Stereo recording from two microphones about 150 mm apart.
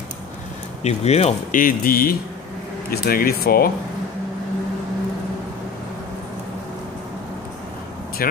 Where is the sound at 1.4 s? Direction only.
70° left (ahead or behind); by 3.7 s 90° left.